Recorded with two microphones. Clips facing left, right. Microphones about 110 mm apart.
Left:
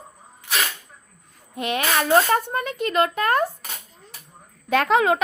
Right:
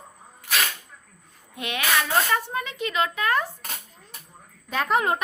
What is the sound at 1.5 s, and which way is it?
Speech, 40° left (ahead or behind).